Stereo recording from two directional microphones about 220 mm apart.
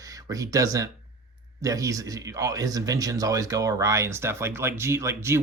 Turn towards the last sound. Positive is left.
turn(degrees=-10)  # may be behind; listen again after turning